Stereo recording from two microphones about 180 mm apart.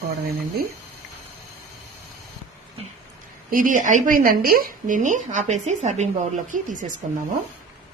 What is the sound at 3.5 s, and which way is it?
A woman's voice, 50° right (ahead or behind).